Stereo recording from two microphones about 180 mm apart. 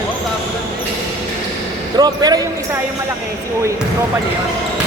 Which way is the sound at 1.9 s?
20° right (ahead or behind).